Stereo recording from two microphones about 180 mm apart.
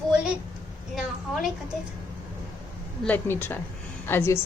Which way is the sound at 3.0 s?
10° left (ahead or behind).